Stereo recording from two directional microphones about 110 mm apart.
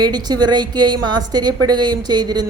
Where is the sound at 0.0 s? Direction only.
40° right (ahead or behind).